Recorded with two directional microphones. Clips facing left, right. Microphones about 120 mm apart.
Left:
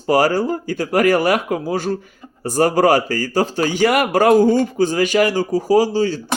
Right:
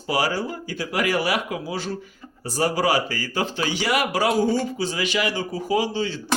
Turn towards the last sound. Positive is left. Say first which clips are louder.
# left 8 dB
turn(degrees=40)  # may be behind; listen again after turning